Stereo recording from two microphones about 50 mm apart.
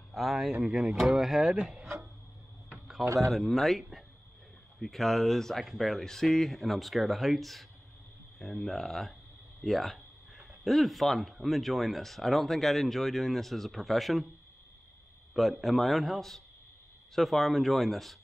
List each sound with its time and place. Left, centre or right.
0.1 s speech: centre
0.5 s speech: centre
3.3 s speech: centre
15.6 s speech: centre